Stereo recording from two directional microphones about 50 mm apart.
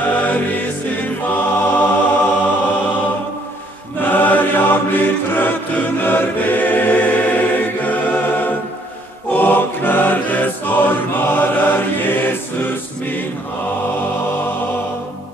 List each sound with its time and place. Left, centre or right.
0.1 s music: left
4.0 s chant: left
9.3 s choir: left